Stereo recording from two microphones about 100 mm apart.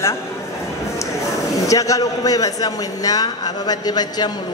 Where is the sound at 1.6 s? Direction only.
35° left (ahead or behind).